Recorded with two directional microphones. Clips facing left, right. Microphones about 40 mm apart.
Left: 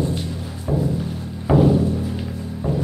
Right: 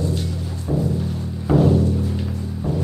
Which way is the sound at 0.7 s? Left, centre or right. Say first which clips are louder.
Even; centre.